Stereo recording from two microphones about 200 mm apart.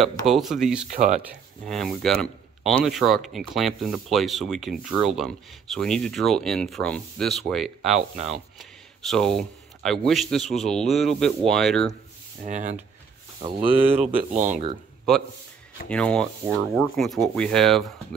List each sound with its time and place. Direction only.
0.2 s speech: centre (ahead or behind)
0.8 s speech: 40° right (ahead or behind)
1.7 s speech: centre (ahead or behind)
12.4 s speech: 40° right (ahead or behind)
13.4 s speech: 25° right (ahead or behind)
14.3 s speech: 40° right (ahead or behind)
15.9 s speech: 5° left (ahead or behind)